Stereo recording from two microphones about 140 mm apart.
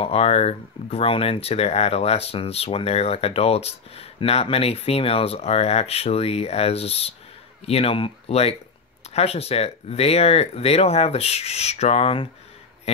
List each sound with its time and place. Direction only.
0.0 s speech: 45° left (ahead or behind)